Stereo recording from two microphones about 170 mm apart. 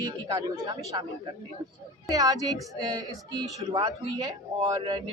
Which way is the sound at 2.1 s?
20° right (ahead or behind).